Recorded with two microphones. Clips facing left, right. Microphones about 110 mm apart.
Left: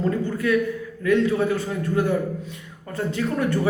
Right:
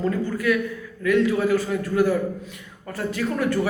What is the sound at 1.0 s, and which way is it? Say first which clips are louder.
A man's voice: even; 25° left (ahead or behind).